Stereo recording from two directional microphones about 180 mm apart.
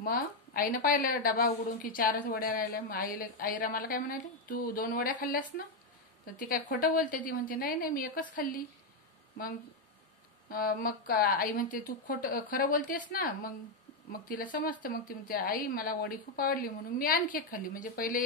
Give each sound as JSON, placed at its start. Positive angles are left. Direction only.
{"t": 0.0, "sound": "a woman's voice", "side_deg": 55}
{"t": 10.5, "sound": "a woman's voice", "side_deg": 55}